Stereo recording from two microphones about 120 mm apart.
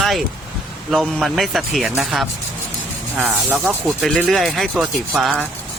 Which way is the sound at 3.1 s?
15° right (ahead or behind).